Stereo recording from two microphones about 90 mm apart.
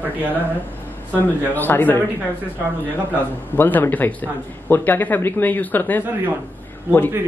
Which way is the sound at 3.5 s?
20° left (ahead or behind).